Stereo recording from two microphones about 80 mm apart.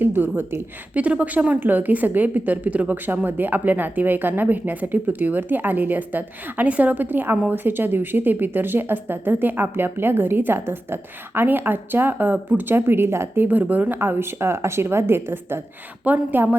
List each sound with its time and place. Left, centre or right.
0.0 s speech: right